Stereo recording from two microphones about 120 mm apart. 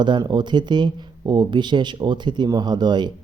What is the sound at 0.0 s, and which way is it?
Speech, 40° right (ahead or behind).